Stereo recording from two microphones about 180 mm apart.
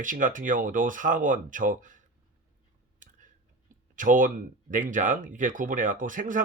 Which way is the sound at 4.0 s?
45° right (ahead or behind).